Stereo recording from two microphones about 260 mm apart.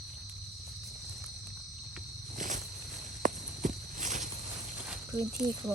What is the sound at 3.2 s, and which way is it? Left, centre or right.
Walk, right.